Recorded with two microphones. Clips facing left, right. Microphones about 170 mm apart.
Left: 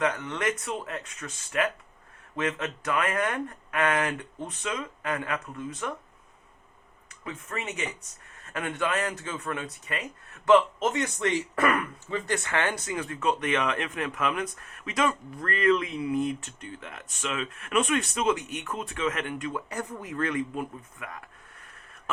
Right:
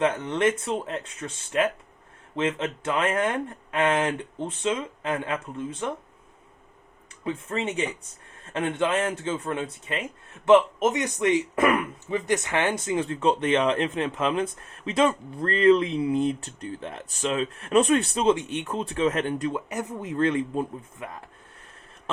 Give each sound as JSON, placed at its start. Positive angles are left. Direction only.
{"t": 0.0, "sound": "speech", "side_deg": -30}
{"t": 7.3, "sound": "speech", "side_deg": -30}